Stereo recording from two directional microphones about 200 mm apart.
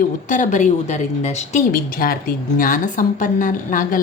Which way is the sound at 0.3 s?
40° left (ahead or behind).